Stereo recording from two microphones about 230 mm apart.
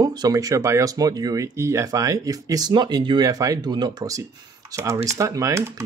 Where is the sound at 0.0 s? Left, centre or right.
Centre.